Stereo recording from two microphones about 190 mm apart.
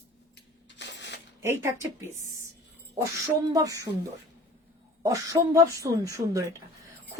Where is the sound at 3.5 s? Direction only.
20° right (ahead or behind).